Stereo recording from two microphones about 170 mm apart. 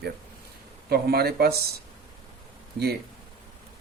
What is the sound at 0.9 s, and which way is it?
Speech, 65° right (ahead or behind).